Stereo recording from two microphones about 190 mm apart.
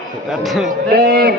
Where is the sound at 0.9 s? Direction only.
55° right (ahead or behind).